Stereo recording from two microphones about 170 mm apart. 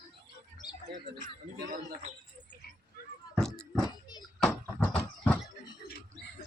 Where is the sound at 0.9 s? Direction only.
50° right (ahead or behind).